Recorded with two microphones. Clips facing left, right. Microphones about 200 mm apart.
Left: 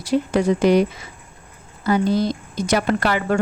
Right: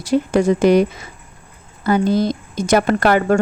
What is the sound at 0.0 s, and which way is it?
A woman's voice, 45° right (ahead or behind).